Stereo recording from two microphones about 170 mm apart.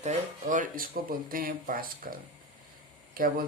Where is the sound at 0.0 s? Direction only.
45° right (ahead or behind).